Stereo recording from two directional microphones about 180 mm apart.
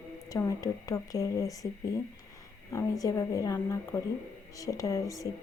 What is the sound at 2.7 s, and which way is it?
Speech, 15° left (ahead or behind).